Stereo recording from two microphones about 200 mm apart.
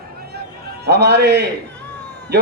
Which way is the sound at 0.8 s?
55° right (ahead or behind).